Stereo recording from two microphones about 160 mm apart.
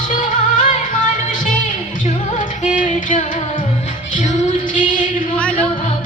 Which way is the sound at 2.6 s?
50° left (ahead or behind).